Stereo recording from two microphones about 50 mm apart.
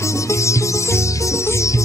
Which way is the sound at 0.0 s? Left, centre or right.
Left.